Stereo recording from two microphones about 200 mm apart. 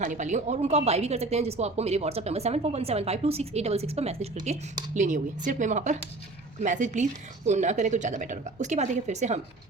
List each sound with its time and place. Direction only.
0.0 s a woman's voice: 40° right (ahead or behind)